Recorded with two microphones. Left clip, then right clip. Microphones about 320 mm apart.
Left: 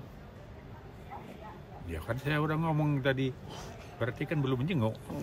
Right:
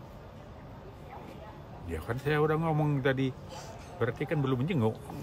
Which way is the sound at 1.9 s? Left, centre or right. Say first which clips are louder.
Right 3 dB; centre.